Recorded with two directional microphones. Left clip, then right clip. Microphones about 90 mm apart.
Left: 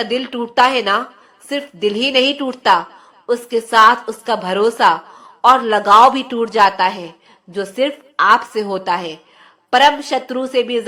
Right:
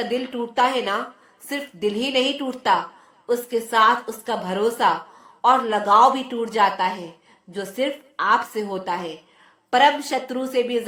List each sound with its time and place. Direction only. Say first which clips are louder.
0.0 s a woman's voice: left 5 dB; 25° left (ahead or behind)
1.5 s a woman's voice: left 6 dB; 20° left (ahead or behind)
4.0 s a woman's voice: left 7 dB; 20° left (ahead or behind)
4.3 s a woman's voice: left 7 dB; 30° left (ahead or behind)
8.1 s a woman's voice: left 8 dB; 35° left (ahead or behind); by 10.8 s 20° left (ahead or behind)